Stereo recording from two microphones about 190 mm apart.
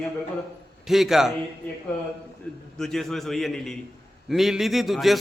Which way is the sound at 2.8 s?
Centre (ahead or behind).